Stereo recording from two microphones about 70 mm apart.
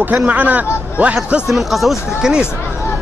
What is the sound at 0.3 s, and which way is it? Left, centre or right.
Speech, right.